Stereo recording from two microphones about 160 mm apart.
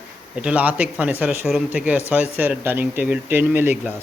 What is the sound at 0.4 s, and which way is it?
A man's voice, 10° right (ahead or behind).